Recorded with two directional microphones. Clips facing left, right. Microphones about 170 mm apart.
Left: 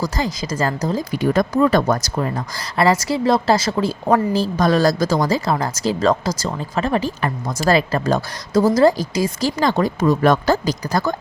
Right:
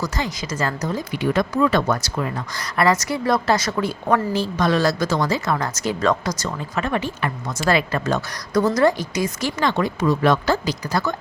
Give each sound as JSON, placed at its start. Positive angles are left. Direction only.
{"t": 0.0, "sound": "speech", "side_deg": 35}